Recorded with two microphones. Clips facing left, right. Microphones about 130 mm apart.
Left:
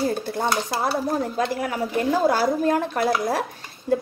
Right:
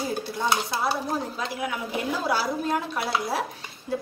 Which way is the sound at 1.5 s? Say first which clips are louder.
Left 4 dB; 45° left (ahead or behind).